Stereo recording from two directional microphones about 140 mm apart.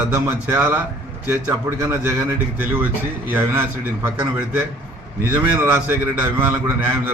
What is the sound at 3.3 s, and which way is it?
Speech, 15° right (ahead or behind).